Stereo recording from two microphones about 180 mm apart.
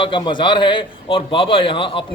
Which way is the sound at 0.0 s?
25° left (ahead or behind).